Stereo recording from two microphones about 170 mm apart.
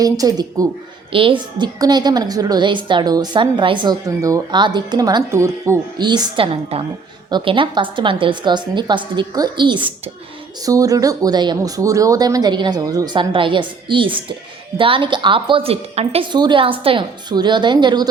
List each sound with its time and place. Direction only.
0.0 s a woman's voice: 20° right (ahead or behind)